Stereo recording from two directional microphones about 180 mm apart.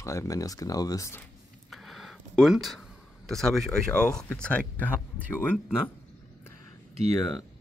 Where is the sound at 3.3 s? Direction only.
Centre (ahead or behind).